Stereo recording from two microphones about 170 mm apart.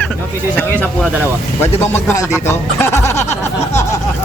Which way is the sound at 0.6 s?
10° left (ahead or behind).